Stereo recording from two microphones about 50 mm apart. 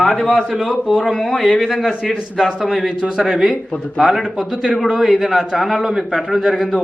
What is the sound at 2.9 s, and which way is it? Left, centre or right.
A man's voice, centre.